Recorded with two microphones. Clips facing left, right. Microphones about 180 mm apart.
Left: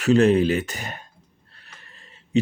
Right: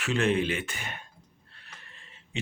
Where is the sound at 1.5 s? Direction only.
40° left (ahead or behind).